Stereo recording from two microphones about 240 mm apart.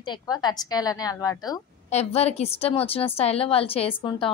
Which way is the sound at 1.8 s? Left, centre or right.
Left.